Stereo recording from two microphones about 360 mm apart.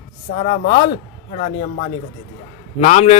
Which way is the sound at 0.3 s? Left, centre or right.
Centre.